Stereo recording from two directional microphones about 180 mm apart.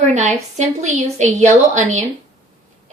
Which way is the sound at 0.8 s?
40° right (ahead or behind).